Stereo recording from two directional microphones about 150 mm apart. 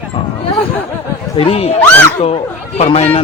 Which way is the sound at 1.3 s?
40° left (ahead or behind).